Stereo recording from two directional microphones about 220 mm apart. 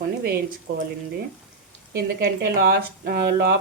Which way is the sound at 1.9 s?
50° right (ahead or behind).